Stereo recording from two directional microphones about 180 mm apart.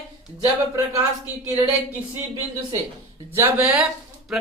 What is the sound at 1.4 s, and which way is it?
Speech, 20° right (ahead or behind).